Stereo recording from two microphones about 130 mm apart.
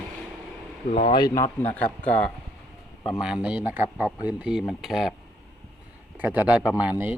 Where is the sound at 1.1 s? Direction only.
30° left (ahead or behind).